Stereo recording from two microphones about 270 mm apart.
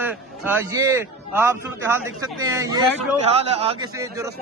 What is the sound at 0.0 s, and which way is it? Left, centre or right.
A man's voice, centre.